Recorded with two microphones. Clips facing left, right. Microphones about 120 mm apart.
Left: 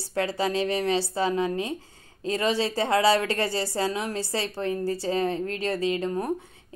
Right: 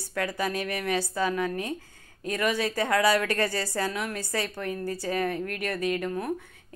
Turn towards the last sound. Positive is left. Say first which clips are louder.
# left 2 dB
turn(degrees=25)  # may be behind; listen again after turning